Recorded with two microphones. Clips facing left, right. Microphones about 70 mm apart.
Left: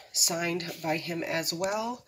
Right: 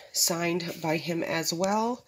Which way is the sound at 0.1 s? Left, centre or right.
Right.